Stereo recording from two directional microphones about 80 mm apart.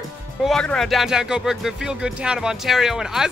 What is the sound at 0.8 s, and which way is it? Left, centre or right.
Speech, centre.